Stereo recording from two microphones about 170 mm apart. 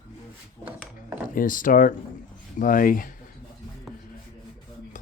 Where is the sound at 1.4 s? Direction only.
50° left (ahead or behind).